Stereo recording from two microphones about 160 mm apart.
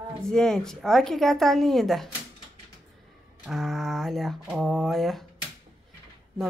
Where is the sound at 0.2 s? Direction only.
5° left (ahead or behind).